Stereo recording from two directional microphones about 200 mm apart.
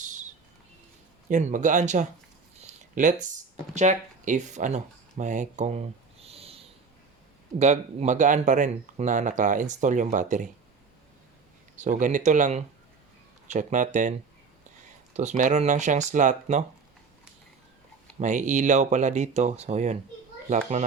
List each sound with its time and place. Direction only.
1.3 s speech: 35° right (ahead or behind)
2.6 s a sound: 40° right (ahead or behind)
3.8 s speech: 35° right (ahead or behind)
11.8 s speech: 40° right (ahead or behind)
15.1 s speech: 35° right (ahead or behind)
18.2 s speech: 35° right (ahead or behind)